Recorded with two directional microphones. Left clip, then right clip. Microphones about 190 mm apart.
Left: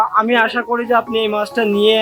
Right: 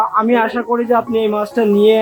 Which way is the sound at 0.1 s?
Centre (ahead or behind).